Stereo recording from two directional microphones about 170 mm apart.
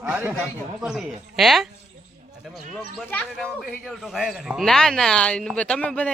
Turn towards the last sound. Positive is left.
turn(degrees=5)  # may be behind; listen again after turning